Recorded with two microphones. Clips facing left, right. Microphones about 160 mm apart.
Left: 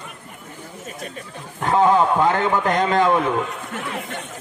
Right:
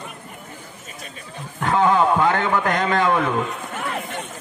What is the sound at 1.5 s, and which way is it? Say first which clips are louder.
A man's voice: left 1 dB; 25° left (ahead or behind).